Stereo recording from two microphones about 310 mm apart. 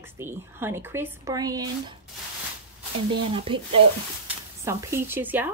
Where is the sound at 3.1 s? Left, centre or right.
Centre.